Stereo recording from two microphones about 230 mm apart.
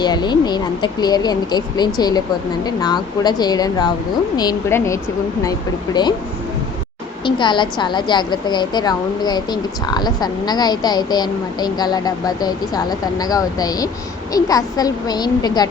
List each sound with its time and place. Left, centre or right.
0.0 s a woman's voice: centre
7.3 s a woman's voice: centre